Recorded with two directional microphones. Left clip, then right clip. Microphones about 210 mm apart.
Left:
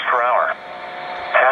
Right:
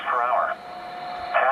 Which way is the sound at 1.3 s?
40° left (ahead or behind).